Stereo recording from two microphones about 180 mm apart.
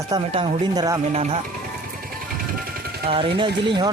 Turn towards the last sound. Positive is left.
turn(degrees=-25)  # may be behind; listen again after turning